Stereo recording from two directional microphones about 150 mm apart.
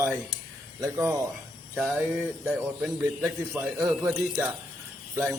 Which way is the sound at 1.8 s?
5° right (ahead or behind).